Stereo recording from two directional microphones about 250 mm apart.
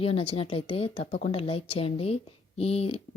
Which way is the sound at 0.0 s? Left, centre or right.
Left.